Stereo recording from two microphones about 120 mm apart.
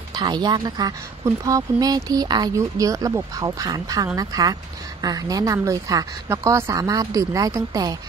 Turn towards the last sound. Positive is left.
turn(degrees=-30)  # may be behind; listen again after turning